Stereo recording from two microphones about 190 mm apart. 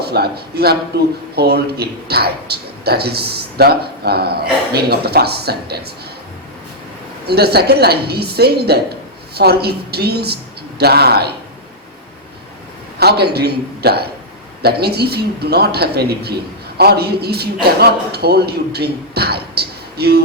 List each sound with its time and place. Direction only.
0.0 s a man's voice: 55° right (ahead or behind)
7.3 s a man's voice: 55° right (ahead or behind)
13.0 s a man's voice: 60° right (ahead or behind)